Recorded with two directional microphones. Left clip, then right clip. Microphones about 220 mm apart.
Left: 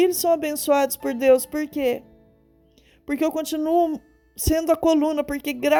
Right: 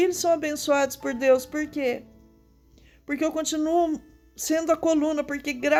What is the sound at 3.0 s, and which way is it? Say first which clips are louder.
Speech: left 2 dB; 30° left (ahead or behind).